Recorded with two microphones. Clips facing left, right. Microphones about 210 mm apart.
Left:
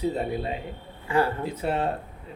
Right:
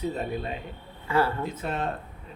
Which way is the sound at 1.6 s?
30° left (ahead or behind).